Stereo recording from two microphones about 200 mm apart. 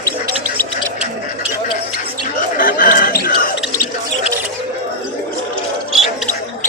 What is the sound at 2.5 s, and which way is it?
Basketball bounce, 45° left (ahead or behind).